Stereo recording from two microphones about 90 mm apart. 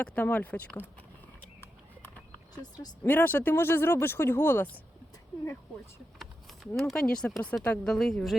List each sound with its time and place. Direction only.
0.0 s speech: 15° left (ahead or behind)
1.6 s horse: 20° left (ahead or behind)
3.0 s speech: 20° left (ahead or behind)
6.1 s speech: centre (ahead or behind)